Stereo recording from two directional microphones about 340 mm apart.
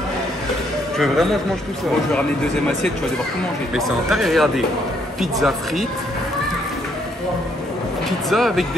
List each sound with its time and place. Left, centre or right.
0.9 s a man's voice: centre
3.7 s speech: centre
8.3 s speech: centre